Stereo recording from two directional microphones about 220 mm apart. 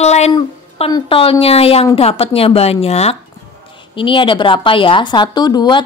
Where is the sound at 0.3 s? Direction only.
20° left (ahead or behind).